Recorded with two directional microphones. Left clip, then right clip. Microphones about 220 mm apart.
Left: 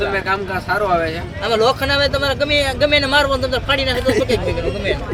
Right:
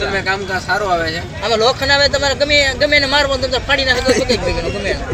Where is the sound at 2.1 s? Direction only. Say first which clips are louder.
Right 3 dB; 15° left (ahead or behind).